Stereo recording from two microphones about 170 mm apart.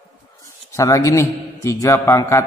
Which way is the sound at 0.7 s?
20° left (ahead or behind).